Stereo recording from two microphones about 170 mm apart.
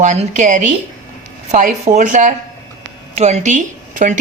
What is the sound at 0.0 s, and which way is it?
Speech, 45° right (ahead or behind).